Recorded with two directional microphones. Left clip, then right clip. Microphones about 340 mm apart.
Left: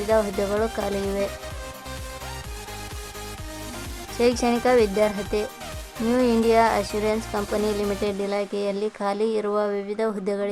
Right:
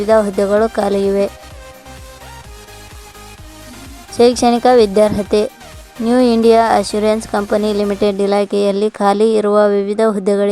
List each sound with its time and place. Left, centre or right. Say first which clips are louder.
0.1 s speech: right 10 dB; centre
4.2 s a woman's voice: right 10 dB; centre